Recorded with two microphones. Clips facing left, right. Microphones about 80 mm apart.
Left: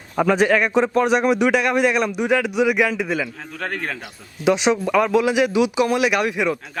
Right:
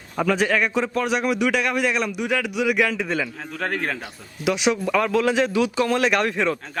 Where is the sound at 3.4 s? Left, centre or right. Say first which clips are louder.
Right 1 dB; centre.